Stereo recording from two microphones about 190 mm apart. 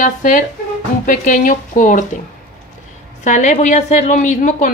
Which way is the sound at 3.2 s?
40° left (ahead or behind).